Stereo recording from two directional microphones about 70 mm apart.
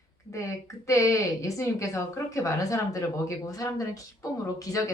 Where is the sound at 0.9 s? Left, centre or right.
Left.